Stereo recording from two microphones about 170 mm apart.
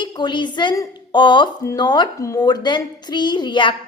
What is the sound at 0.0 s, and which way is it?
A woman's voice, 25° left (ahead or behind).